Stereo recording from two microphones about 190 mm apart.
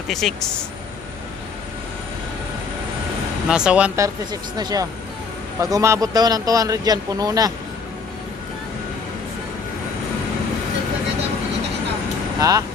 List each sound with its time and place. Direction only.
0.1 s speech: centre (ahead or behind)
3.4 s speech: 5° right (ahead or behind)
4.0 s a man's voice: 20° right (ahead or behind)
12.4 s speech: 20° right (ahead or behind)